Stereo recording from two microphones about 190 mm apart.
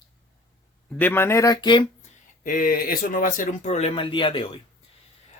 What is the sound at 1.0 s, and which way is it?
Speech, 10° left (ahead or behind).